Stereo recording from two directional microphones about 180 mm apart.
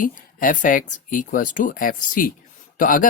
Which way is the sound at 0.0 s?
50° left (ahead or behind).